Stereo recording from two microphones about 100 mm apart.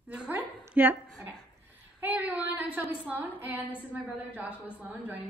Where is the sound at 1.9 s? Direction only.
20° right (ahead or behind).